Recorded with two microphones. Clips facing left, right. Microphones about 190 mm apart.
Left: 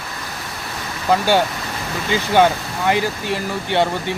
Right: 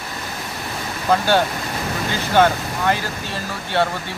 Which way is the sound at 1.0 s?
15° left (ahead or behind).